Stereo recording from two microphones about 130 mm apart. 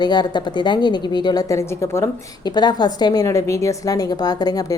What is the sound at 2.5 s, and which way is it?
A woman's voice, 35° left (ahead or behind).